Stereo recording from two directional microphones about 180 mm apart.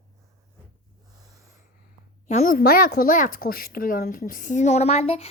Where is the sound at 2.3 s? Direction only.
50° left (ahead or behind); by 5.3 s 35° left (ahead or behind).